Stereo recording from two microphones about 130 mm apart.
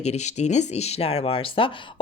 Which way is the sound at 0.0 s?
60° left (ahead or behind).